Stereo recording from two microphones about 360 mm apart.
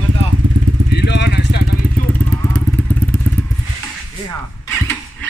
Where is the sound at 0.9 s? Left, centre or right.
Left.